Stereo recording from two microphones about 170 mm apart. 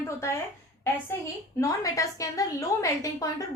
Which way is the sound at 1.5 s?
20° left (ahead or behind).